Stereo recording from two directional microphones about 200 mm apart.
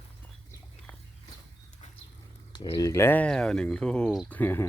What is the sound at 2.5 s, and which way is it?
Speech, 20° left (ahead or behind).